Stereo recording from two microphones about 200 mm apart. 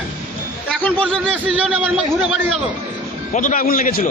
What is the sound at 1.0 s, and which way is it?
Speech, 5° right (ahead or behind).